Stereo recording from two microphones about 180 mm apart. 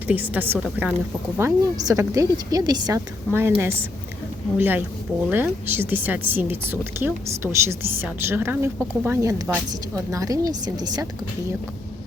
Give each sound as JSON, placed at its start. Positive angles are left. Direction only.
{"t": 0.1, "sound": "a woman's voice", "side_deg": -10}